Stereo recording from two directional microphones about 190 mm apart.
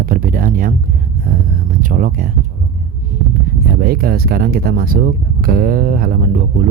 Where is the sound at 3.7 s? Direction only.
50° right (ahead or behind).